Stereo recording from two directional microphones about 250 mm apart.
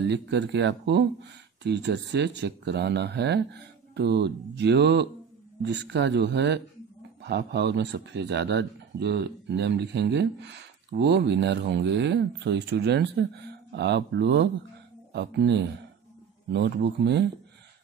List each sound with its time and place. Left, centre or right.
0.1 s a man's voice: right